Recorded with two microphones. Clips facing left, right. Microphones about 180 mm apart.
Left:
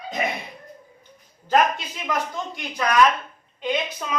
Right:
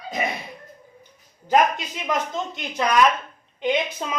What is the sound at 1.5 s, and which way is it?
Speech, 20° right (ahead or behind).